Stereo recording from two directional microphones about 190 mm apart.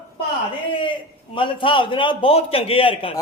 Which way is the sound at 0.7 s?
25° left (ahead or behind).